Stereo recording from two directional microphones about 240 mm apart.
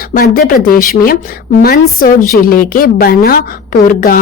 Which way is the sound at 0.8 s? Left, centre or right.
Left.